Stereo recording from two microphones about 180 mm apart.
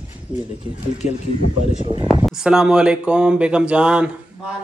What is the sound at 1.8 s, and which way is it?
Speech, 25° right (ahead or behind).